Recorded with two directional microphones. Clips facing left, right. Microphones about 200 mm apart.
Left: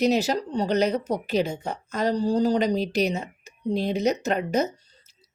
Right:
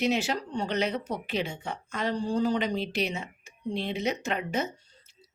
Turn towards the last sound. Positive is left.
turn(degrees=40)  # may be behind; listen again after turning